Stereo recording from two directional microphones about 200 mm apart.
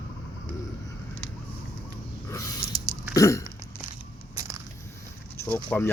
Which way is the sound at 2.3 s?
15° left (ahead or behind).